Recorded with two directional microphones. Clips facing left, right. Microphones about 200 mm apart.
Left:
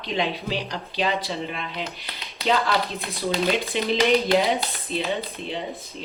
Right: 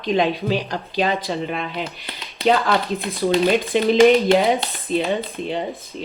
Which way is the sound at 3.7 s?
50° right (ahead or behind).